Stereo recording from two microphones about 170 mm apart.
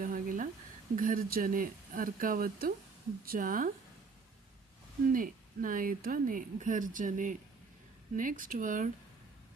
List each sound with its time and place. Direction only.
0.0 s a sound: 55° right (ahead or behind)
0.9 s speech: 55° right (ahead or behind)
5.1 s speech: 55° right (ahead or behind)